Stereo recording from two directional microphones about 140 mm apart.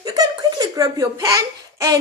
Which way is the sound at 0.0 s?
25° right (ahead or behind).